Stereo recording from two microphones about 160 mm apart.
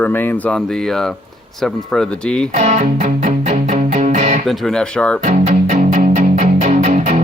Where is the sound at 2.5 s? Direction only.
50° right (ahead or behind).